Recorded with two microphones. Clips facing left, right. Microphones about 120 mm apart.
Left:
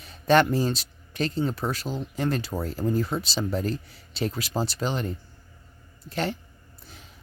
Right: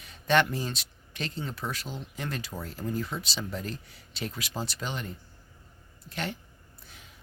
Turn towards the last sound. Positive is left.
turn(degrees=35)  # may be behind; listen again after turning